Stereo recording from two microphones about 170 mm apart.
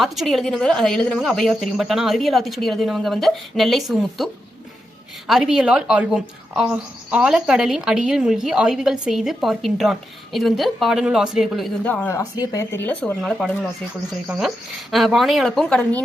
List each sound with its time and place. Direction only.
0.0 s a woman's voice: centre (ahead or behind)
5.3 s a woman's voice: centre (ahead or behind)
11.9 s a woman's voice: 10° left (ahead or behind)